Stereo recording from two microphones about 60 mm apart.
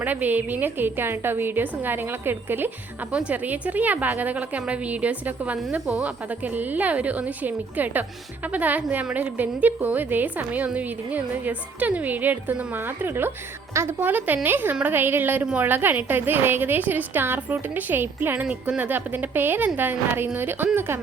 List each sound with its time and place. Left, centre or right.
0.0 s a woman's voice: right
3.1 s a woman's voice: centre; by 21.0 s right